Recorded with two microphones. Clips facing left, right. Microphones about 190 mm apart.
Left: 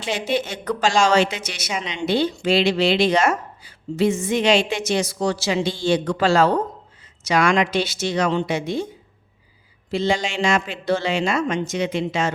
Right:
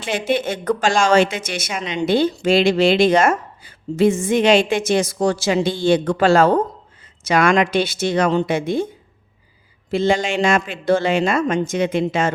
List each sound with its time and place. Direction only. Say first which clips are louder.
0.0 s a woman's voice: right 3 dB; 55° right (ahead or behind)
9.9 s a woman's voice: right 4 dB; 50° right (ahead or behind)